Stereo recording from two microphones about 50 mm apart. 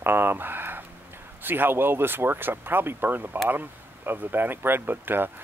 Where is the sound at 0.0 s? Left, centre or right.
Right.